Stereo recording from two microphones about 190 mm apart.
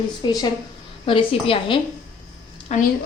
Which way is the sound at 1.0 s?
30° left (ahead or behind).